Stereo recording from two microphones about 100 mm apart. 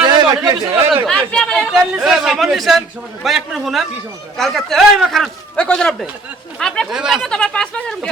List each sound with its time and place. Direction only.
0.0 s a sound: 45° right (ahead or behind)
1.0 s chatter: 5° left (ahead or behind)
1.6 s speech: 10° right (ahead or behind)
6.9 s speech: 5° right (ahead or behind)
7.3 s speech: 10° left (ahead or behind)